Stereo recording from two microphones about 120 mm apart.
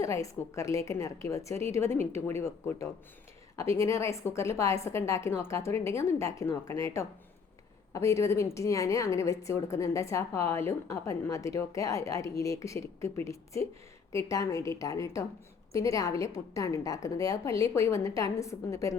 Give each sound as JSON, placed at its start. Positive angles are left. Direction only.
{"t": 0.0, "sound": "a woman's voice", "side_deg": 25}